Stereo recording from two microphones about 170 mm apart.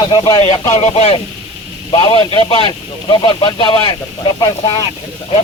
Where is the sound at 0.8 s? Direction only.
40° left (ahead or behind).